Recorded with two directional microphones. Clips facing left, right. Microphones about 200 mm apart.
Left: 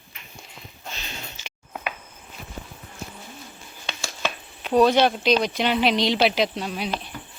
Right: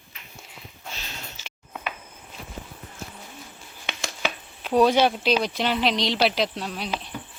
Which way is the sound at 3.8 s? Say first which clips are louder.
Even; 20° right (ahead or behind).